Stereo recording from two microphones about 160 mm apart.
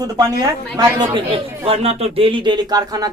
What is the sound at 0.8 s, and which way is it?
A man's voice, 30° right (ahead or behind).